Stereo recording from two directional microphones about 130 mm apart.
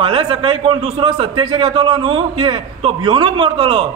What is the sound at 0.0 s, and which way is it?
A man's voice, 45° right (ahead or behind).